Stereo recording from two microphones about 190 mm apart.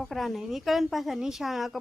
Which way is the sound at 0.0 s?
Centre (ahead or behind).